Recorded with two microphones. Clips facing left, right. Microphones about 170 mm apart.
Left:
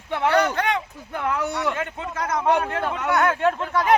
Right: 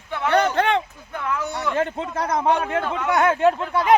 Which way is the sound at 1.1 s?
55° left (ahead or behind).